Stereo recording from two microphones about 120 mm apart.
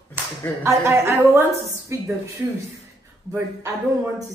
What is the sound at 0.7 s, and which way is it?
A man's voice, 25° right (ahead or behind).